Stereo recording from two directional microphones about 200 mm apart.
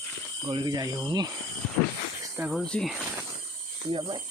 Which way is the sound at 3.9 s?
25° right (ahead or behind).